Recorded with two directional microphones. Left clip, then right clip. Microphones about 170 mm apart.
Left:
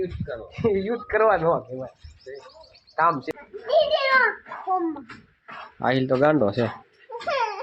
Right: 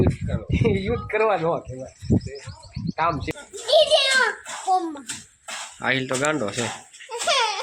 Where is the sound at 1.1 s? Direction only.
15° right (ahead or behind).